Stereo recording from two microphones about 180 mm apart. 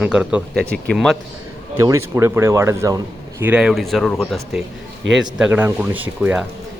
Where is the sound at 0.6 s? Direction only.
5° left (ahead or behind).